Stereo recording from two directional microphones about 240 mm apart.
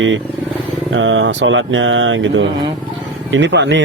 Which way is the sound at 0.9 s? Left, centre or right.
Right.